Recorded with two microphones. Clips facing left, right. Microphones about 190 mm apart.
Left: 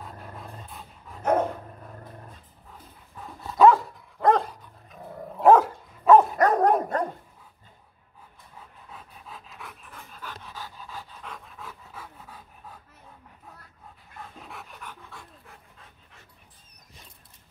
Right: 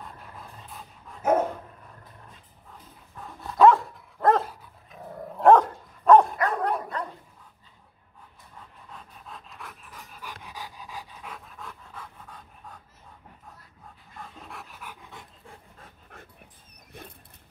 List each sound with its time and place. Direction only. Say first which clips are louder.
0.0 s dog: left 3 dB; centre (ahead or behind)
3.2 s dog: even; centre (ahead or behind)
6.3 s dog: left 6 dB; 40° left (ahead or behind)
8.5 s dog: even; 5° left (ahead or behind)
10.2 s dog: even; 15° right (ahead or behind); by 12.8 s 5° left (ahead or behind)
14.2 s dog: even; centre (ahead or behind); by 15.5 s 20° right (ahead or behind)
15.8 s dog: right 5 dB; 50° right (ahead or behind)